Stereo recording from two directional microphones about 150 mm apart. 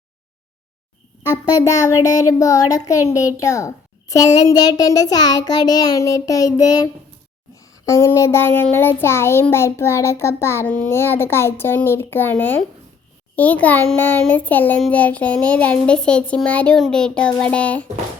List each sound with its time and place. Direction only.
1.5 s a child's voice: 20° left (ahead or behind)